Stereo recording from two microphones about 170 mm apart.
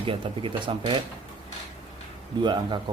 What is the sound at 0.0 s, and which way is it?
Speech, 30° right (ahead or behind).